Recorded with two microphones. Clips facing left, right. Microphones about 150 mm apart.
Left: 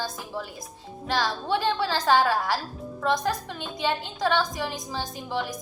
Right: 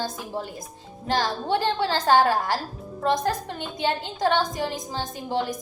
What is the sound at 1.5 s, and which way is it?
A woman's voice, 50° right (ahead or behind).